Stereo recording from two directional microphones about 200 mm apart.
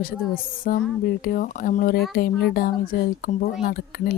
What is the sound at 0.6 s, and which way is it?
Speech, 45° left (ahead or behind).